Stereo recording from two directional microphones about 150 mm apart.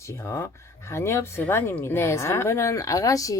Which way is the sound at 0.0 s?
20° left (ahead or behind).